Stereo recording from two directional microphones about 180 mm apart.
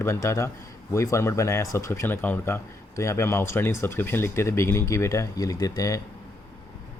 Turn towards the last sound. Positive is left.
turn(degrees=20)  # may be behind; listen again after turning